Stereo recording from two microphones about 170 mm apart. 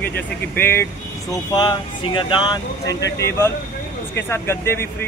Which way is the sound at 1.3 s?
25° left (ahead or behind).